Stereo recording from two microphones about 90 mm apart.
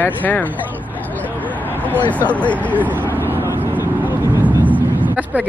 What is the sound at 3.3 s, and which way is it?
Vehicle, 25° right (ahead or behind).